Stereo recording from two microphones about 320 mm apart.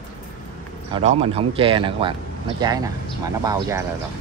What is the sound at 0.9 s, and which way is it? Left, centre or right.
Speech, centre.